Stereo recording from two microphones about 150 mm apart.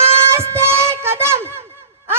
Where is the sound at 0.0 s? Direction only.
15° right (ahead or behind).